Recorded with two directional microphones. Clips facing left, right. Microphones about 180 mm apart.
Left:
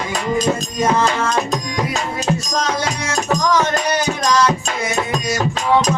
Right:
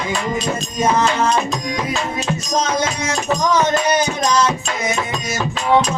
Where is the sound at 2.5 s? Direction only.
20° right (ahead or behind).